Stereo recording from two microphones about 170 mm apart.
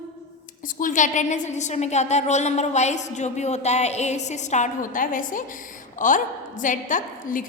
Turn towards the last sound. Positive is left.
turn(degrees=50)  # may be behind; listen again after turning